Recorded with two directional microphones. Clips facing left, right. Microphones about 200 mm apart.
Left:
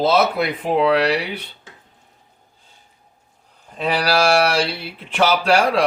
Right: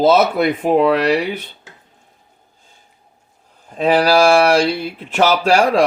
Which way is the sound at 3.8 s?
45° right (ahead or behind).